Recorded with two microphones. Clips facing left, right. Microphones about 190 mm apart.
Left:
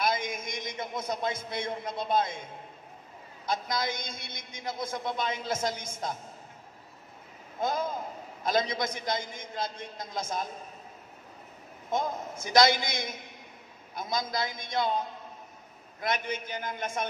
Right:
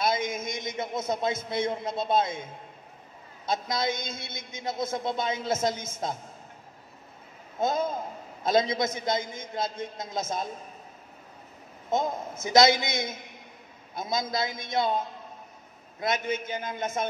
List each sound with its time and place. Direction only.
0.0 s a man's voice: 25° right (ahead or behind)
3.4 s a man's voice: 25° right (ahead or behind)
7.6 s a man's voice: 25° right (ahead or behind)
11.9 s a man's voice: 20° right (ahead or behind)
16.0 s a man's voice: 20° right (ahead or behind)